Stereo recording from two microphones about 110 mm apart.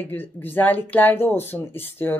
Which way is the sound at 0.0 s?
15° left (ahead or behind).